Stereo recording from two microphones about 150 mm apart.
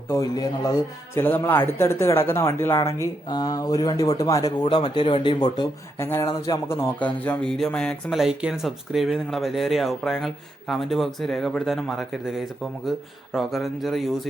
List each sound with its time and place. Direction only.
0.1 s a man's voice: 25° left (ahead or behind)
6.0 s speech: 15° left (ahead or behind); by 14.3 s centre (ahead or behind)